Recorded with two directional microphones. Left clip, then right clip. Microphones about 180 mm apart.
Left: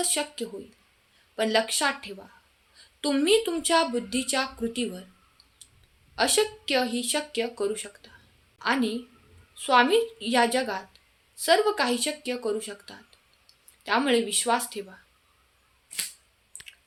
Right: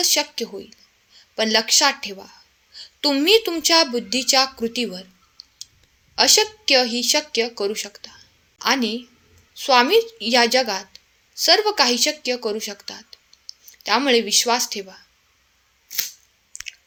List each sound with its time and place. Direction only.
0.0 s speech: 30° right (ahead or behind)
6.1 s a woman's voice: 30° right (ahead or behind)
16.5 s a sound: 30° right (ahead or behind)